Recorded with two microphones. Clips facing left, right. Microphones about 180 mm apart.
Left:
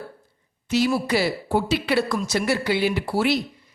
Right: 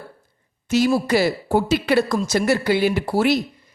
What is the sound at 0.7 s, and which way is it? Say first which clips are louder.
Speech: right 3 dB; 45° right (ahead or behind).